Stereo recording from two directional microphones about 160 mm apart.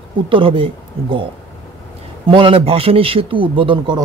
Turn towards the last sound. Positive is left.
turn(degrees=-30)  # may be behind; listen again after turning